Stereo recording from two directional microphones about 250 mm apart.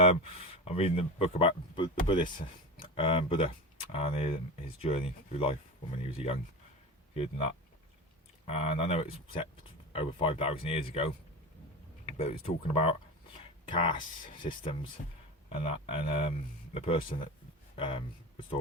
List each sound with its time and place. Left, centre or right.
0.6 s speech: left
12.1 s speech: left